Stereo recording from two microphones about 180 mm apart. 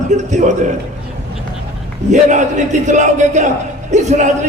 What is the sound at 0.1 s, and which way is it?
Speech, 40° right (ahead or behind).